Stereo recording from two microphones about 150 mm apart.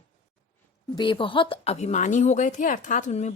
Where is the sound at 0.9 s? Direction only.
35° left (ahead or behind).